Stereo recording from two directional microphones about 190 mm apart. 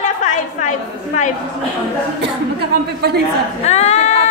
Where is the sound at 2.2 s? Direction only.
60° right (ahead or behind).